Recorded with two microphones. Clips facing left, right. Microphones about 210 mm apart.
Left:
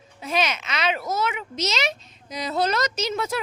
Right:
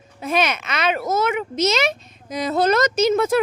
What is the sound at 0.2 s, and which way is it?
A child's voice, 55° right (ahead or behind).